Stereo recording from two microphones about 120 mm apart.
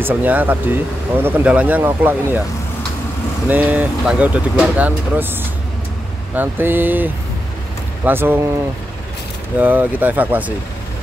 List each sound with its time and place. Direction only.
0.0 s speech: 15° right (ahead or behind)
3.4 s speech: 15° right (ahead or behind)
9.6 s speech: 15° right (ahead or behind)